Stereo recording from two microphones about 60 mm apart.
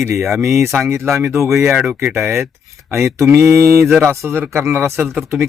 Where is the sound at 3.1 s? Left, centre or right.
Right.